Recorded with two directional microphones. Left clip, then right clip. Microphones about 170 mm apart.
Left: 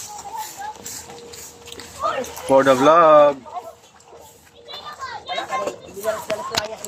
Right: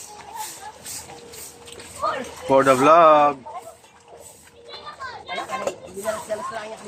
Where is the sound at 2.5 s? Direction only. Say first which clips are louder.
Left 1 dB; 10° right (ahead or behind).